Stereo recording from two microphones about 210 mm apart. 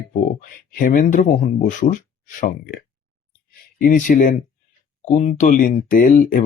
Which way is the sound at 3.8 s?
40° left (ahead or behind).